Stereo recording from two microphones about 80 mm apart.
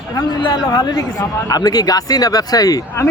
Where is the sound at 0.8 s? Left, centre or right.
Left.